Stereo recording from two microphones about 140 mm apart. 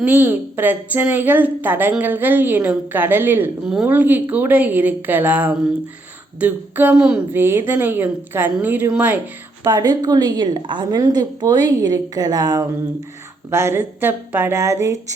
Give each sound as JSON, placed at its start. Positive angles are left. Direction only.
{"t": 0.0, "sound": "a woman's voice", "side_deg": -15}
{"t": 9.6, "sound": "a woman's voice", "side_deg": -30}